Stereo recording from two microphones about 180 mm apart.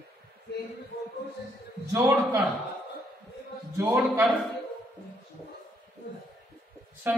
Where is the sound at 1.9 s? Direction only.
15° right (ahead or behind).